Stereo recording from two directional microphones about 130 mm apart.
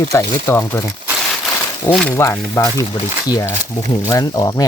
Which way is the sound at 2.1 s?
20° left (ahead or behind).